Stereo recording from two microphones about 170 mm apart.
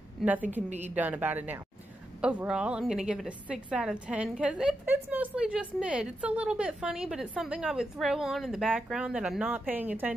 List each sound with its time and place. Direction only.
0.2 s a woman's voice: 10° right (ahead or behind)